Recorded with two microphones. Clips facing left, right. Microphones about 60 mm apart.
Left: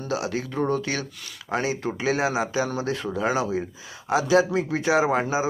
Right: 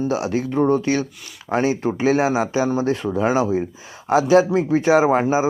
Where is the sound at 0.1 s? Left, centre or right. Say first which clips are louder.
Right 6 dB; right.